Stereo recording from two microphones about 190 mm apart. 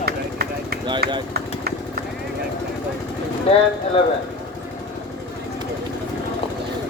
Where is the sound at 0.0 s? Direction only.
55° right (ahead or behind).